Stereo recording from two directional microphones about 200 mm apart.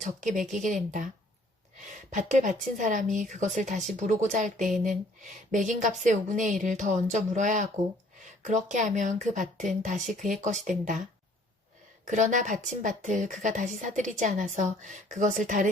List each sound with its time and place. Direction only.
0.0 s a woman's voice: 40° right (ahead or behind)
2.0 s a woman's voice: 40° right (ahead or behind)
12.0 s a woman's voice: 40° right (ahead or behind)